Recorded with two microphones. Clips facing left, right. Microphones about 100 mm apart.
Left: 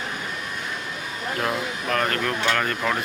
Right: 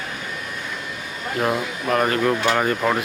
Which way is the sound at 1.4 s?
10° right (ahead or behind).